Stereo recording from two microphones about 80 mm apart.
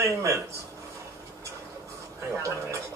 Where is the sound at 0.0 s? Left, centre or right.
Right.